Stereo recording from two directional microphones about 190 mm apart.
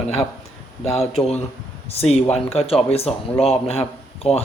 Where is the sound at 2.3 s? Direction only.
35° left (ahead or behind).